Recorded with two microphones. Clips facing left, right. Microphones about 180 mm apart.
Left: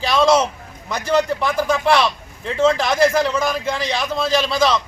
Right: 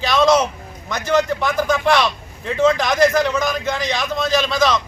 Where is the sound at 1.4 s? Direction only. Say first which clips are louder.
Even; 5° left (ahead or behind).